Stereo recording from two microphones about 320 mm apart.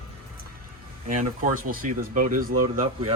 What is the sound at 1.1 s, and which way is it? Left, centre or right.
Speech, right.